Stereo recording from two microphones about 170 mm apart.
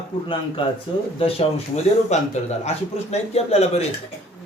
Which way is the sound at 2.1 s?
40° left (ahead or behind).